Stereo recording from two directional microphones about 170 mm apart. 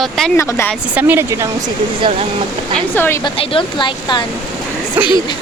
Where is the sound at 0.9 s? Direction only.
10° right (ahead or behind).